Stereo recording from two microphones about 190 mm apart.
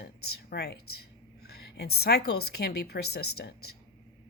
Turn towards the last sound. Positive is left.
turn(degrees=55)  # may be behind; listen again after turning